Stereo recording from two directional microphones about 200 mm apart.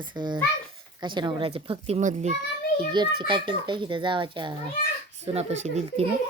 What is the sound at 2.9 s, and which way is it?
A child's voice, 20° right (ahead or behind).